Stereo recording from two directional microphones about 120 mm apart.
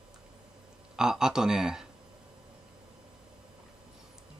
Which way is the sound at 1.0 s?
5° right (ahead or behind).